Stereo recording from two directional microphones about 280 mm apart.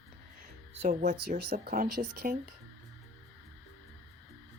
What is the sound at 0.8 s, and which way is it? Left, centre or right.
Speech, right.